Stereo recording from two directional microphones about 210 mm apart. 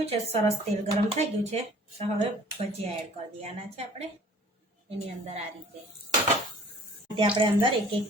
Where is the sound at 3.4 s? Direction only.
30° right (ahead or behind).